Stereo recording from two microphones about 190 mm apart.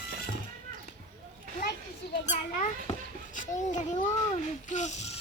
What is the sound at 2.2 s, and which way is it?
Children playing, 40° left (ahead or behind).